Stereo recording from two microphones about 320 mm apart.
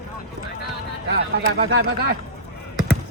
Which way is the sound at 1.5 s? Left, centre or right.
Right.